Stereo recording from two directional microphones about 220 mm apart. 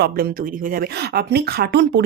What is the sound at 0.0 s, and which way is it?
Speech, 45° right (ahead or behind).